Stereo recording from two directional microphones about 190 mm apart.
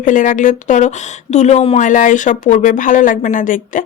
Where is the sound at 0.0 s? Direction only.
45° left (ahead or behind).